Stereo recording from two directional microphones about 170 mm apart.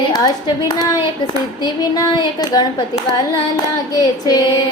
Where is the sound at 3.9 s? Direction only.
20° left (ahead or behind).